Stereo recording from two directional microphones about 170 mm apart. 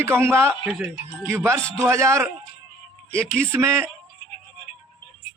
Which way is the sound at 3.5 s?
15° right (ahead or behind).